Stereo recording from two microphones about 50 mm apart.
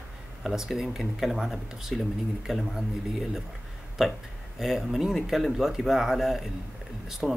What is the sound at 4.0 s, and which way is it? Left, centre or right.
Speech, centre.